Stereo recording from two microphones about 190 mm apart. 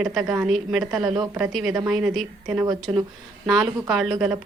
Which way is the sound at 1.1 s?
20° right (ahead or behind).